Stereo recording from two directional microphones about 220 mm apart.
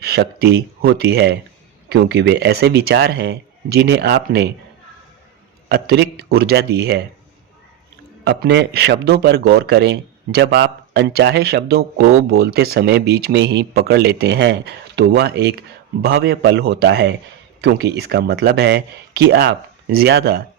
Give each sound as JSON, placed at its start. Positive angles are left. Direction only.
{"t": 0.0, "sound": "speech", "side_deg": -45}
{"t": 5.6, "sound": "a man's voice", "side_deg": -50}
{"t": 8.2, "sound": "speech", "side_deg": -50}